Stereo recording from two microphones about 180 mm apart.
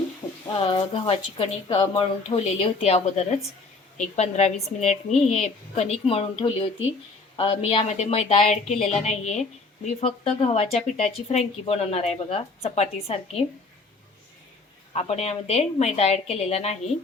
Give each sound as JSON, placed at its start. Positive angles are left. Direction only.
{"t": 0.4, "sound": "speech", "side_deg": 30}
{"t": 14.9, "sound": "speech", "side_deg": 35}